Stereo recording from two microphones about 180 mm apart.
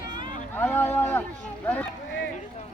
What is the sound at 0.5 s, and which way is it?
Speech, 10° left (ahead or behind).